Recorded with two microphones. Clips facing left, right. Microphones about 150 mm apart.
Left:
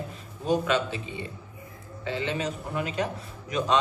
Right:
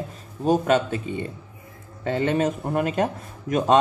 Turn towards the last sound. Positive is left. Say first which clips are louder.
# right 6 dB
turn(degrees=-50)  # may be behind; listen again after turning